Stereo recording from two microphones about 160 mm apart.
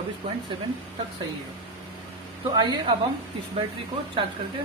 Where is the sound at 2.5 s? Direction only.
25° right (ahead or behind).